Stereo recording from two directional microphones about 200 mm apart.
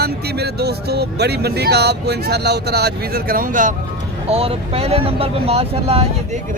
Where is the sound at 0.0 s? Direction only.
55° right (ahead or behind).